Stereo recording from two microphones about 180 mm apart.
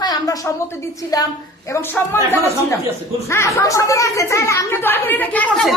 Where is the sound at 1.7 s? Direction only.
15° left (ahead or behind).